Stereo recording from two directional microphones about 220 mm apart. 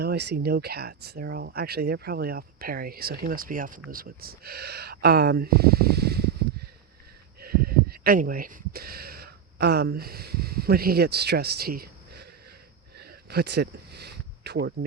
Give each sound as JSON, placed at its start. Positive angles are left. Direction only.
{"t": 0.0, "sound": "speech", "side_deg": -50}
{"t": 7.4, "sound": "speech", "side_deg": -40}
{"t": 13.0, "sound": "a sound", "side_deg": -45}